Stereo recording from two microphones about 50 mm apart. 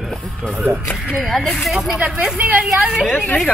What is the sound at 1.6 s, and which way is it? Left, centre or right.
Speech, centre.